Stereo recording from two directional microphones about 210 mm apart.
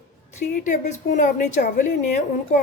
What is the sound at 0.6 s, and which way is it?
A woman's voice, 35° left (ahead or behind).